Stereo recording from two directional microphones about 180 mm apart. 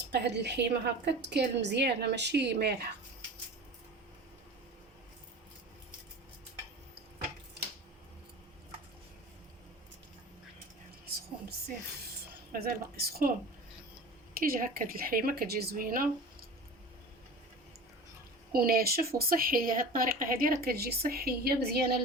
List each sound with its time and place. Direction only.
0.1 s a woman's voice: 70° right (ahead or behind)
12.5 s speech: 55° right (ahead or behind)
14.3 s a woman's voice: 50° right (ahead or behind)
18.5 s speech: 55° right (ahead or behind)